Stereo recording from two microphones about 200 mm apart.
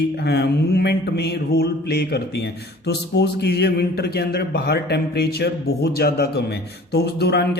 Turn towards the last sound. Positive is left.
turn(degrees=55)  # may be behind; listen again after turning